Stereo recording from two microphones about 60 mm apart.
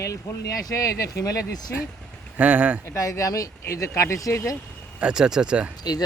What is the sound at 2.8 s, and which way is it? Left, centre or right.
Speech, left.